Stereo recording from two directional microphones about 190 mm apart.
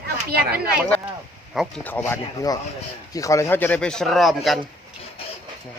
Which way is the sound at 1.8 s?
10° left (ahead or behind).